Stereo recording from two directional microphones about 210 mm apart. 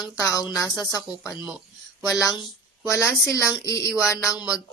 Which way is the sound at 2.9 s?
15° left (ahead or behind).